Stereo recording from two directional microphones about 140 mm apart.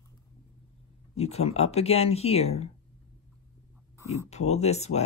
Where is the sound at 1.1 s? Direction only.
50° left (ahead or behind).